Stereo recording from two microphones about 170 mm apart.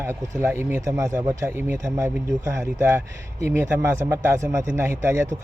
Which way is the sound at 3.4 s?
15° right (ahead or behind).